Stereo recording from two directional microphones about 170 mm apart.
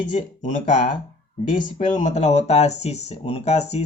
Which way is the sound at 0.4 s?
50° left (ahead or behind).